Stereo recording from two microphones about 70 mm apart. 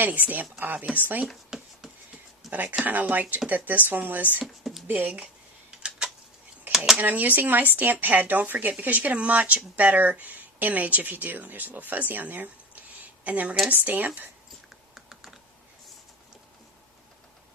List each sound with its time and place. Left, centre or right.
0.0 s speech: right
1.3 s a sound: centre
2.5 s speech: right
6.7 s a sound: centre
6.9 s speech: right
14.9 s typing: centre